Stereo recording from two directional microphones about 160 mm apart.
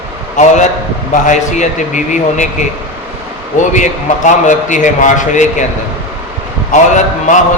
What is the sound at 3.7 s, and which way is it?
A man's voice, 50° left (ahead or behind).